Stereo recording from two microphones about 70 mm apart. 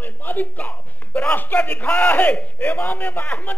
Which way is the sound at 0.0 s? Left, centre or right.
Left.